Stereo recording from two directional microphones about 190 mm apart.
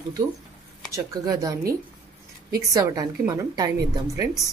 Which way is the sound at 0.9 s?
20° right (ahead or behind).